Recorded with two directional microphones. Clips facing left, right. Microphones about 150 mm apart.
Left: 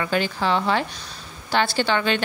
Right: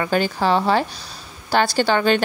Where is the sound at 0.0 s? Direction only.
40° right (ahead or behind).